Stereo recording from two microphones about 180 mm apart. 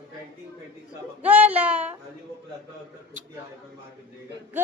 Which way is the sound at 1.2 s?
10° right (ahead or behind).